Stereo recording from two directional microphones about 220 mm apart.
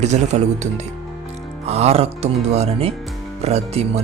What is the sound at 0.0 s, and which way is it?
Speech, 30° right (ahead or behind).